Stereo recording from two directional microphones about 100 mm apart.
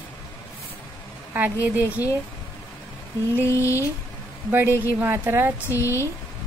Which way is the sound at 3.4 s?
30° left (ahead or behind).